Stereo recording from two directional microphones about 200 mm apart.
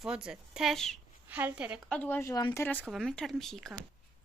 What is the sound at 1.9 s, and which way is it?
Speech, 10° left (ahead or behind).